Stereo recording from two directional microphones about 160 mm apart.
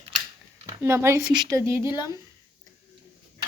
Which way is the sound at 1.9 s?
25° left (ahead or behind).